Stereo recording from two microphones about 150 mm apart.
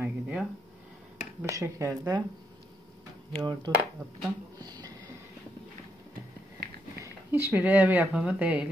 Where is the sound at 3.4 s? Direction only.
30° right (ahead or behind).